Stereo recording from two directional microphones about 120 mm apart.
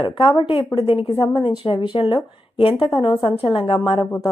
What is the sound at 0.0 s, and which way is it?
Speech, 45° left (ahead or behind).